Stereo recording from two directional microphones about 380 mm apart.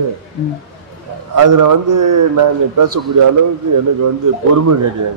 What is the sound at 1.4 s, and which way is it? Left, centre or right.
A man's voice, right.